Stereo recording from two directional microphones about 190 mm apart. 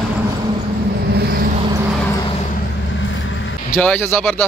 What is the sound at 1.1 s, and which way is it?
Vehicle, 55° right (ahead or behind).